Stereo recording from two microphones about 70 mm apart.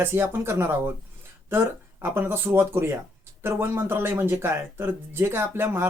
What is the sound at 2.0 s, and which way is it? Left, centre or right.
Speech, right.